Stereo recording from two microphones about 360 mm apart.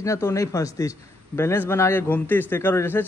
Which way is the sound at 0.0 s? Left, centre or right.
Centre.